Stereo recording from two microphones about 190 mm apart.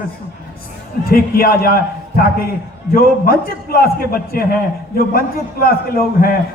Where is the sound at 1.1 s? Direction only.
50° left (ahead or behind).